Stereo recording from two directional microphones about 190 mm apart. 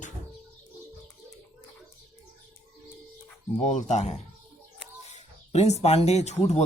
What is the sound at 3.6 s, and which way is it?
Speech, 40° left (ahead or behind).